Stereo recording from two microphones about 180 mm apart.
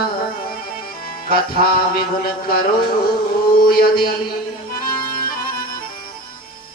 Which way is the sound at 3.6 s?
55° left (ahead or behind).